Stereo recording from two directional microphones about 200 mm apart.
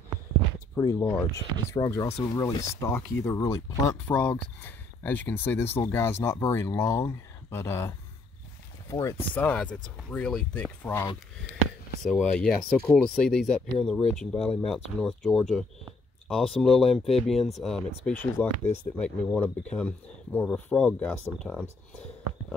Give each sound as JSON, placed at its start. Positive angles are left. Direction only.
{"t": 0.7, "sound": "speech", "side_deg": 20}